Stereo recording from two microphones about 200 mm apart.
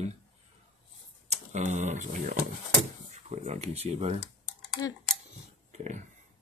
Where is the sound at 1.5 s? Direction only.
35° right (ahead or behind).